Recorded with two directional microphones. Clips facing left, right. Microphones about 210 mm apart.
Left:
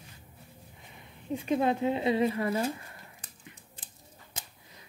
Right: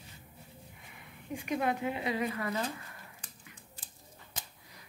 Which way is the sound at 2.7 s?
25° left (ahead or behind).